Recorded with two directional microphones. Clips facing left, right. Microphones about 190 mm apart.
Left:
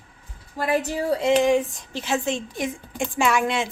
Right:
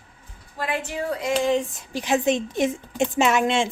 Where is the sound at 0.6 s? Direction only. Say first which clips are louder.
Left 4 dB; 40° left (ahead or behind).